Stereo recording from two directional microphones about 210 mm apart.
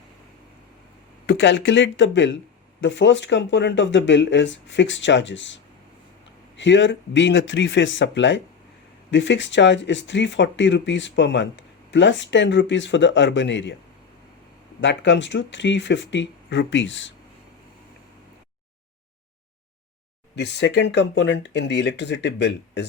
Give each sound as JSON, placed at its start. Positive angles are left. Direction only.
{"t": 1.3, "sound": "speech", "side_deg": 60}
{"t": 6.6, "sound": "speech", "side_deg": 60}
{"t": 14.8, "sound": "speech", "side_deg": 60}
{"t": 20.3, "sound": "speech", "side_deg": 55}